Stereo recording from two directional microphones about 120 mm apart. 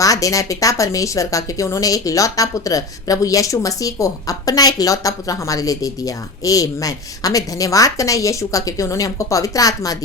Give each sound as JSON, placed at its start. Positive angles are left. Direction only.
{"t": 0.0, "sound": "a woman's voice", "side_deg": 30}